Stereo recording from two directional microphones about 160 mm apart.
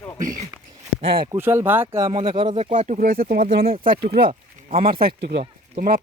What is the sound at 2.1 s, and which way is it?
Speech, 35° right (ahead or behind).